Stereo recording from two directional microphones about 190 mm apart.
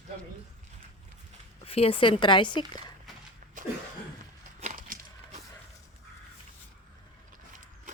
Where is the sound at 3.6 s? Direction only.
40° right (ahead or behind).